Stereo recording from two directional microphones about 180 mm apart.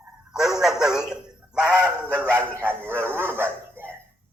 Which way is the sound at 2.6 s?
10° right (ahead or behind).